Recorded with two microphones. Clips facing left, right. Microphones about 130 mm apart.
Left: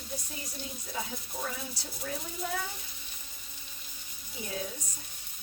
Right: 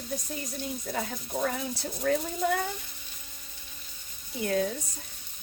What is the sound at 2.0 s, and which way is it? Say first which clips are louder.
Speech: right 11 dB; 80° right.